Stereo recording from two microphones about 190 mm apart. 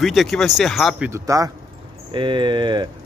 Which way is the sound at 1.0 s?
15° right (ahead or behind).